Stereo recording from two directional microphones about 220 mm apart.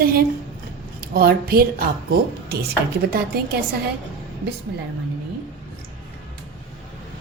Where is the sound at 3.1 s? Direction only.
45° right (ahead or behind).